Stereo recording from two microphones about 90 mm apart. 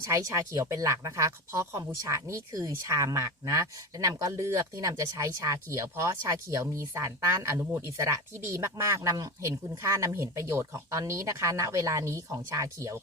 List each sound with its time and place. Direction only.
0.1 s speech: 35° right (ahead or behind)